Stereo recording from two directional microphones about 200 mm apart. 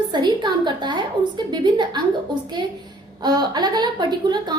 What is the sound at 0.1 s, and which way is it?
A woman's voice, 20° right (ahead or behind).